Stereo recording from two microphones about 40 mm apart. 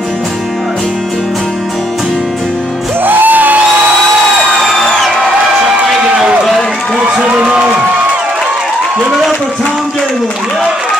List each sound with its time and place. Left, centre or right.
3.0 s music: right
4.7 s music: centre
5.9 s run: centre
7.2 s crowd: right